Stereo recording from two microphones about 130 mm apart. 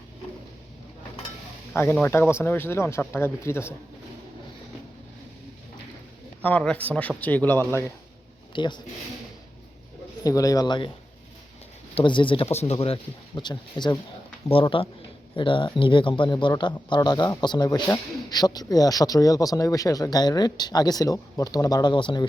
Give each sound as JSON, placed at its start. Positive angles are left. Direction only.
{"t": 1.7, "sound": "speech", "side_deg": 15}
{"t": 6.4, "sound": "speech", "side_deg": 10}
{"t": 8.5, "sound": "speech", "side_deg": 35}
{"t": 10.2, "sound": "speech", "side_deg": 25}
{"t": 11.9, "sound": "speech", "side_deg": 40}